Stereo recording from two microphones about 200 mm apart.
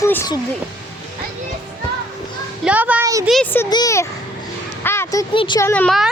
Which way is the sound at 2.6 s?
5° right (ahead or behind).